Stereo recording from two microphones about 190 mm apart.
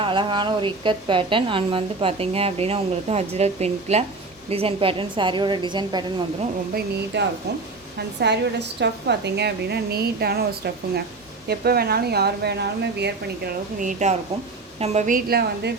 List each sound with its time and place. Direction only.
0.0 s a woman's voice: 25° right (ahead or behind)
6.7 s speech: 65° right (ahead or behind)
11.4 s a woman's voice: 55° right (ahead or behind)